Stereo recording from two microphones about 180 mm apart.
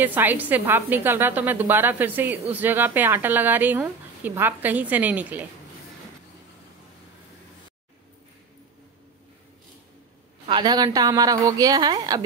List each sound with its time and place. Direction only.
0.0 s a woman's voice: 10° right (ahead or behind)
10.4 s a woman's voice: 25° right (ahead or behind)